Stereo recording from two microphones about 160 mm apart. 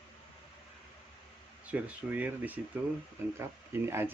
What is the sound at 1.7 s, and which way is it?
Speech, 10° right (ahead or behind).